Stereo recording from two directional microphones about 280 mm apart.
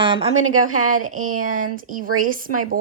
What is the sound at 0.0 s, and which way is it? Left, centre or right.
Speech, centre.